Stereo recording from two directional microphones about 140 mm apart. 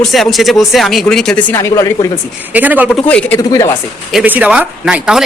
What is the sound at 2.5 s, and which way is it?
Speech, 10° right (ahead or behind).